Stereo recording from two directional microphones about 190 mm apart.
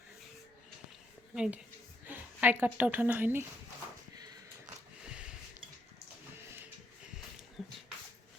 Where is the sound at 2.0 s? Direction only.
10° right (ahead or behind).